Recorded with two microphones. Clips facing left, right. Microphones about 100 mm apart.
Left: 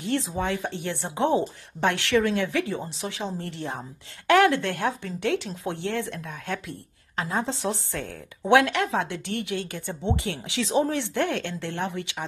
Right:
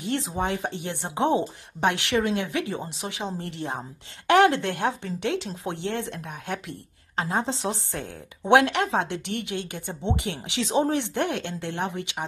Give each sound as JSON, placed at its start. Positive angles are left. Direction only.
{"t": 0.2, "sound": "a woman's voice", "side_deg": -20}